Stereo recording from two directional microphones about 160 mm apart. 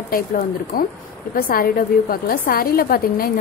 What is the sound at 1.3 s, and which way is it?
A woman's voice, 65° left (ahead or behind).